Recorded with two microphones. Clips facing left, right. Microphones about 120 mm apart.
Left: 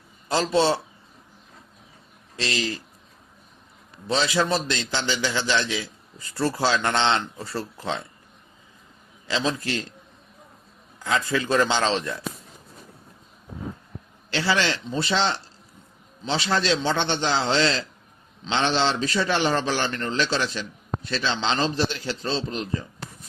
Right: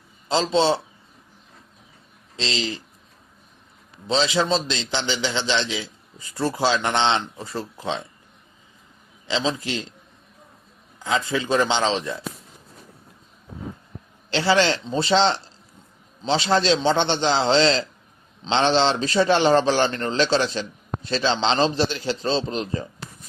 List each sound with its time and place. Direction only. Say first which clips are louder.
0.3 s a man's voice: right 1 dB; 20° right (ahead or behind)
2.3 s a man's voice: even; 25° right (ahead or behind)
4.0 s a man's voice: right 2 dB; 20° right (ahead or behind)
9.2 s a man's voice: right 1 dB; 20° right (ahead or behind)
11.0 s a man's voice: right 1 dB; 20° right (ahead or behind)
14.3 s a man's voice: right 4 dB; 30° right (ahead or behind)